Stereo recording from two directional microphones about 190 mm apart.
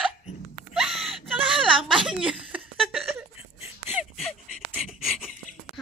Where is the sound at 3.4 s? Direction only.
30° left (ahead or behind).